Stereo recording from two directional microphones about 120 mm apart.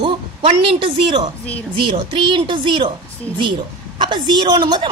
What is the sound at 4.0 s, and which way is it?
Speech, 40° right (ahead or behind).